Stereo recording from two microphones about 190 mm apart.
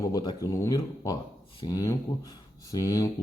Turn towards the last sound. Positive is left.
turn(degrees=20)  # may be behind; listen again after turning